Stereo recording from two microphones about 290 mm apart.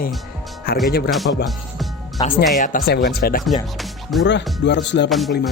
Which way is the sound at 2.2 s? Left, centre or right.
Centre.